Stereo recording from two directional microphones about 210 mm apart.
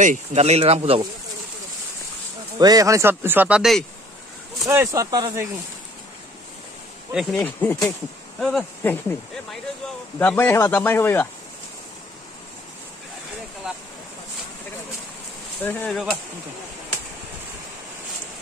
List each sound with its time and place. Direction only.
0.0 s speech: 35° right (ahead or behind)
2.6 s speech: 15° right (ahead or behind)
4.6 s speech: 15° right (ahead or behind)
7.1 s speech: centre (ahead or behind)
7.4 s speech: 10° left (ahead or behind)
10.1 s speech: 10° left (ahead or behind)
15.6 s speech: 10° left (ahead or behind)